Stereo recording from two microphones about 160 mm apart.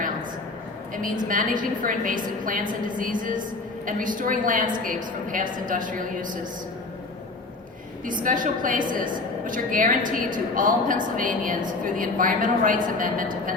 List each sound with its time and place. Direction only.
1.3 s a woman's voice: 55° right (ahead or behind)
8.0 s a woman's voice: 55° right (ahead or behind)